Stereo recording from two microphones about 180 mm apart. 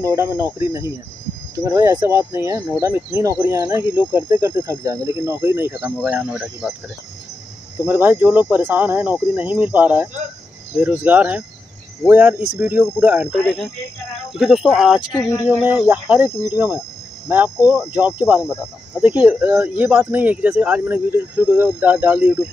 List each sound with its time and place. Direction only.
0.0 s speech: 15° right (ahead or behind)
7.8 s speech: 10° right (ahead or behind)
14.4 s speech: 5° right (ahead or behind)